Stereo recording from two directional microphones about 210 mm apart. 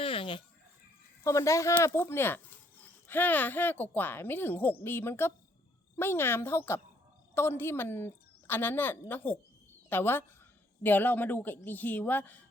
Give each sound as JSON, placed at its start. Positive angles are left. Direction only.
{"t": 0.0, "sound": "chicken", "side_deg": 25}
{"t": 1.2, "sound": "speech", "side_deg": 15}